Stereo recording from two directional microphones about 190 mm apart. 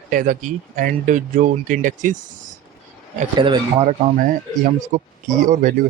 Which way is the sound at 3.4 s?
25° right (ahead or behind).